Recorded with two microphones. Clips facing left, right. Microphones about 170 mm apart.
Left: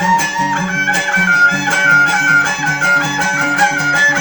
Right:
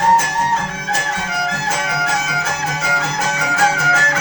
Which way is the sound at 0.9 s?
90° left.